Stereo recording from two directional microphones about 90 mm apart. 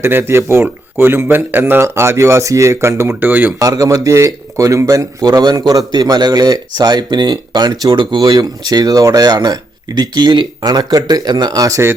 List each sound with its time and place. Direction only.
0.0 s speech: 25° right (ahead or behind)
3.2 s speech: 20° right (ahead or behind)
3.6 s a man's voice: 40° right (ahead or behind)
7.9 s speech: 60° right (ahead or behind)
8.6 s speech: 45° right (ahead or behind)